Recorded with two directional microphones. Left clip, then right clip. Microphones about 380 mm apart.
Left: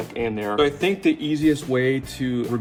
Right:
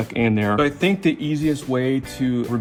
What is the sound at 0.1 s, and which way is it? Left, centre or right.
Speech, centre.